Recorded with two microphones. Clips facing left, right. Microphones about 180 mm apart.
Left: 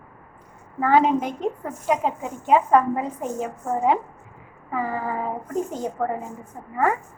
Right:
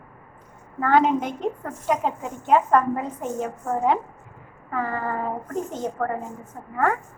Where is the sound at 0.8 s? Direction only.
5° left (ahead or behind).